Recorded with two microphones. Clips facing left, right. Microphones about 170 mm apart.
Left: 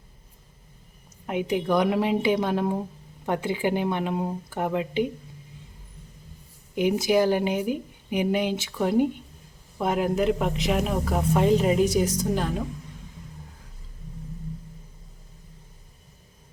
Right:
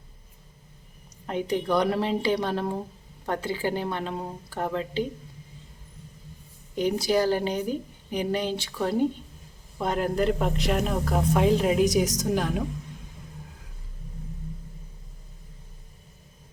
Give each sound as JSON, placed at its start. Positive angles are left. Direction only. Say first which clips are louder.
{"t": 1.3, "sound": "a woman's voice", "louder": "left 1 dB", "side_deg": 10}
{"t": 6.7, "sound": "a woman's voice", "louder": "left 2 dB", "side_deg": 15}